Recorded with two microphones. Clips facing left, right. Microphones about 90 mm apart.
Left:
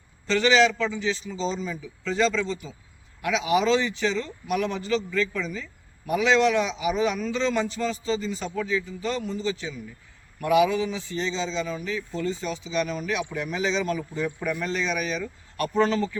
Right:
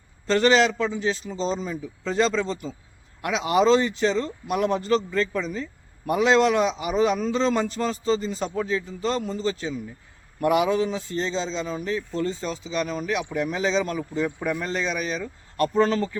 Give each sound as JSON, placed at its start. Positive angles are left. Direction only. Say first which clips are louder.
{"t": 0.3, "sound": "a man's voice", "louder": "right 1 dB", "side_deg": -45}
{"t": 14.3, "sound": "a man's voice", "louder": "right 1 dB", "side_deg": -30}